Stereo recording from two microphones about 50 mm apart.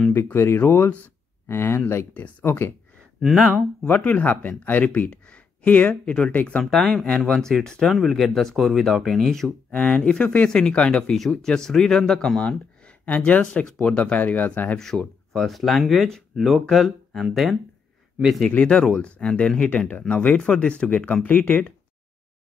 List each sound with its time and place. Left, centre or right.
0.1 s speech: left
3.8 s speech: left
5.1 s a sound: left
5.7 s speech: left
6.7 s speech: centre
7.1 s speech: centre
7.4 s speech: centre
9.7 s speech: left
11.1 s speech: centre
12.4 s speech: left
14.1 s speech: left
14.8 s speech: centre
18.6 s speech: left